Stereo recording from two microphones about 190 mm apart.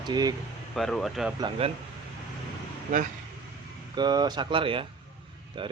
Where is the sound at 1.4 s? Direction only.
30° right (ahead or behind).